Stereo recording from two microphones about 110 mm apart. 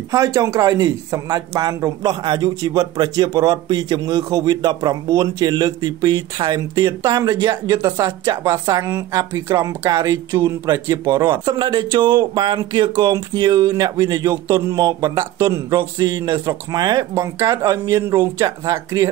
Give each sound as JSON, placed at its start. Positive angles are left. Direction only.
{"t": 0.1, "sound": "speech", "side_deg": -30}
{"t": 11.4, "sound": "speech", "side_deg": -45}